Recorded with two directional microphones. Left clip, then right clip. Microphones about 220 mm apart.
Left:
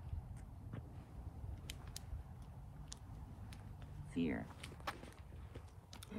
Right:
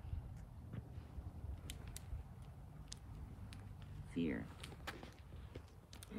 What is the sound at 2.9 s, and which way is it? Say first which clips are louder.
Vehicle: even; 10° left (ahead or behind).